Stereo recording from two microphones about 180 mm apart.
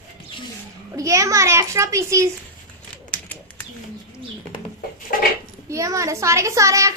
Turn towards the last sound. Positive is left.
turn(degrees=-15)  # may be behind; listen again after turning